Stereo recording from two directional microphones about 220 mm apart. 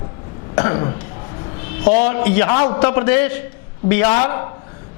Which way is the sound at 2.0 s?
15° left (ahead or behind).